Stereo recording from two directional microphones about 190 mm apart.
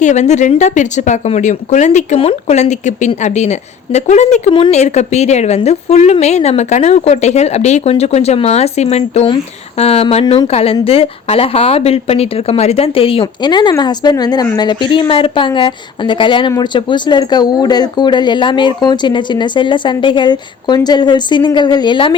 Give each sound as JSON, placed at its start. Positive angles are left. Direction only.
{"t": 0.0, "sound": "a woman's voice", "side_deg": 40}